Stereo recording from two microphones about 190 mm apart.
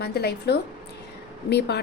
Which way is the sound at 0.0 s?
55° left (ahead or behind).